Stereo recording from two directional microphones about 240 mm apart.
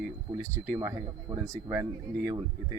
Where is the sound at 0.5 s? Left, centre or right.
Centre.